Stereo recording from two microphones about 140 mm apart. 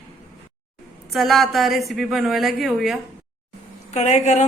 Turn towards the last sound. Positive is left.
turn(degrees=55)  # may be behind; listen again after turning